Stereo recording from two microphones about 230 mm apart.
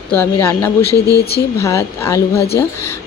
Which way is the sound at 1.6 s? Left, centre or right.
Centre.